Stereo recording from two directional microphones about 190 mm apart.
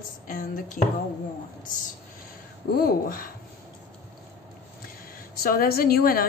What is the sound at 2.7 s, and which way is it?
Speech, 50° left (ahead or behind).